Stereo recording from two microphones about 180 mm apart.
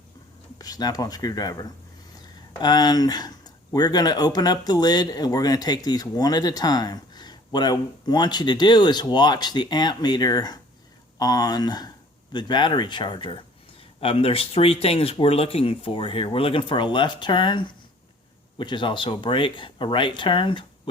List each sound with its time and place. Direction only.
0.6 s speech: 20° left (ahead or behind)